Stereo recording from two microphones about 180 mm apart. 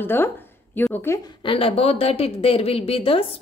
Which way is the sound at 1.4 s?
30° left (ahead or behind).